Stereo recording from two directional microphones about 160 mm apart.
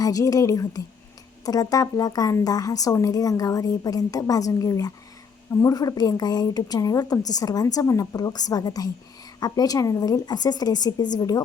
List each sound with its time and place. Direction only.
0.0 s a woman's voice: 20° left (ahead or behind)